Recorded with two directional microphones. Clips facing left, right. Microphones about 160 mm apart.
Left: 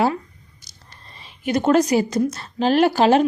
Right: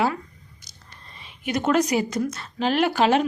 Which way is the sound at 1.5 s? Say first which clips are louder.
Left 4 dB; 35° left (ahead or behind).